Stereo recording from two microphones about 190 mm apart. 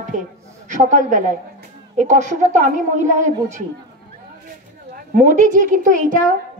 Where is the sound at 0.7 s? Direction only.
40° right (ahead or behind).